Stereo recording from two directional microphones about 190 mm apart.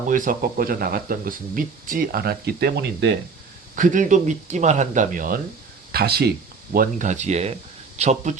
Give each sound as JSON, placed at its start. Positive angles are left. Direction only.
{"t": 0.1, "sound": "speech", "side_deg": -45}
{"t": 3.8, "sound": "speech", "side_deg": -45}
{"t": 6.7, "sound": "speech", "side_deg": -40}